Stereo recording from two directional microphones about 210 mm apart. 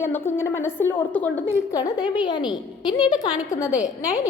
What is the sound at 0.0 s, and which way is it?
A woman's voice, 10° left (ahead or behind).